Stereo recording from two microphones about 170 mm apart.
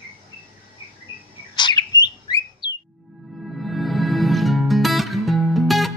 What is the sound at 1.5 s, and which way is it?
Bird, 25° left (ahead or behind).